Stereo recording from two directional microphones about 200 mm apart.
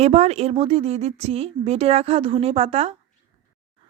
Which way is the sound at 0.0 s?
30° right (ahead or behind).